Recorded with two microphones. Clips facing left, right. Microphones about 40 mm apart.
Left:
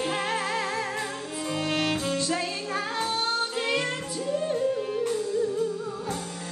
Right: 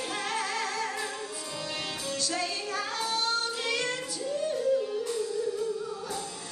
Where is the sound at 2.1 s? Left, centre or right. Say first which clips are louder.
Left 4 dB; left.